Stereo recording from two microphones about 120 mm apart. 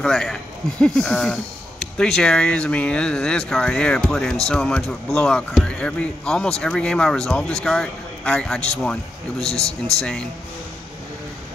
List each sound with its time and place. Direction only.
0.0 s speech: 5° left (ahead or behind)